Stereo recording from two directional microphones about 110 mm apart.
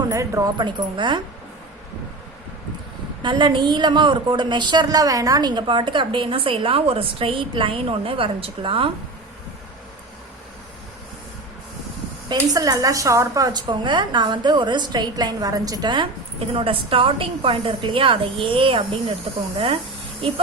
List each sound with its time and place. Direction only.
0.1 s speech: 30° right (ahead or behind)
0.5 s a woman's voice: 45° right (ahead or behind)
3.2 s a woman's voice: 45° right (ahead or behind)
12.3 s a woman's voice: 35° right (ahead or behind)
16.6 s a woman's voice: 55° right (ahead or behind)